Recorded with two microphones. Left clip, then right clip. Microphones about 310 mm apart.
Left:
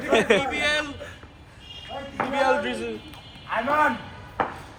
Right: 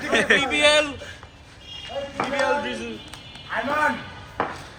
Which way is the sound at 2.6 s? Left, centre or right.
Centre.